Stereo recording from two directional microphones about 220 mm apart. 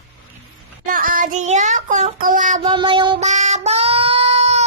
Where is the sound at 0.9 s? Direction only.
40° right (ahead or behind).